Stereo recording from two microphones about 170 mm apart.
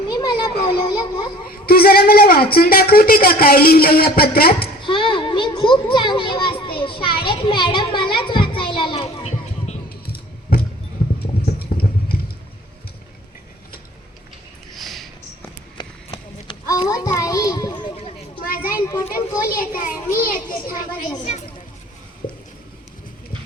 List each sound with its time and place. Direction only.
0.1 s children playing: 25° left (ahead or behind)
1.5 s a woman's voice: 60° left (ahead or behind)
4.8 s children playing: 30° left (ahead or behind)
10.5 s a sound: 60° left (ahead or behind)
11.6 s vehicle: 65° left (ahead or behind)
14.7 s sniff: centre (ahead or behind)
15.8 s run: 25° left (ahead or behind)
16.9 s children playing: 20° left (ahead or behind)
18.4 s a sound: 60° left (ahead or behind)
18.7 s speech: 15° left (ahead or behind)
19.5 s a woman's voice: 55° left (ahead or behind)
21.2 s speech: 40° left (ahead or behind)